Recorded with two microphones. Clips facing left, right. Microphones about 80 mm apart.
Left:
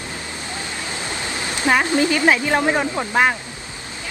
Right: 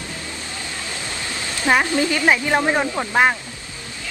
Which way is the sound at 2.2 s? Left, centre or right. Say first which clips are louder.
Left 1 dB; centre.